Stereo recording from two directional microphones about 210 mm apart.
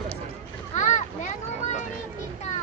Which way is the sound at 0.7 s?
35° left (ahead or behind).